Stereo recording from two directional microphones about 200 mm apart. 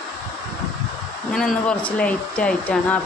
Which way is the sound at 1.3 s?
Centre (ahead or behind).